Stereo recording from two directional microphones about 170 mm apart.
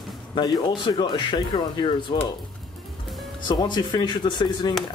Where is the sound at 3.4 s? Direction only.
25° left (ahead or behind).